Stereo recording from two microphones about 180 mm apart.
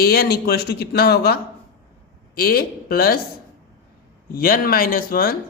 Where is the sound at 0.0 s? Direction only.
60° left (ahead or behind).